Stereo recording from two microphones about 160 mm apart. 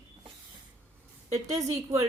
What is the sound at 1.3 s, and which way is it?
Speech, 20° right (ahead or behind).